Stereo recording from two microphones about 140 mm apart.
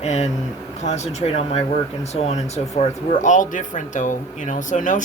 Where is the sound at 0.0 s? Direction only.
50° left (ahead or behind).